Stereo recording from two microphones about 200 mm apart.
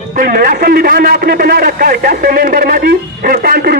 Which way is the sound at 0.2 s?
45° right (ahead or behind).